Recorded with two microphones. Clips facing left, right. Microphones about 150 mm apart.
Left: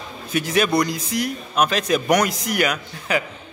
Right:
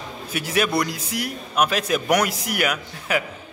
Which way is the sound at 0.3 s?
5° right (ahead or behind).